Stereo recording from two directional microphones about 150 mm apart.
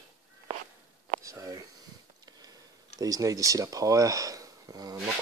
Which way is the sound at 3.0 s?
25° right (ahead or behind).